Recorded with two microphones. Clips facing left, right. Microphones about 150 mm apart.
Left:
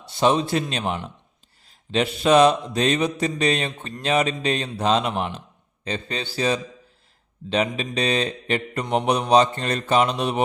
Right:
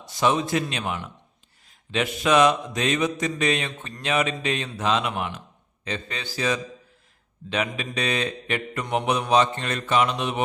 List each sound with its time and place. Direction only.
0.1 s mantra: 30° left (ahead or behind)